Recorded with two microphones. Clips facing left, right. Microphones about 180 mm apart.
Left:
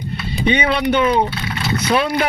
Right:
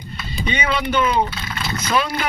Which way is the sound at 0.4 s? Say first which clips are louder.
Left 6 dB; 60° left (ahead or behind).